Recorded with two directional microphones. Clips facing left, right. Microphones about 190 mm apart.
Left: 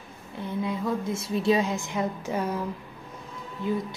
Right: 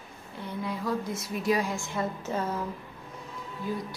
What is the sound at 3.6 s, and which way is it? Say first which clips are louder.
Speech: left 5 dB; 20° left (ahead or behind).